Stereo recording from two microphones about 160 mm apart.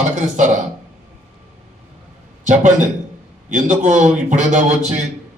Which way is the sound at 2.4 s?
50° right (ahead or behind).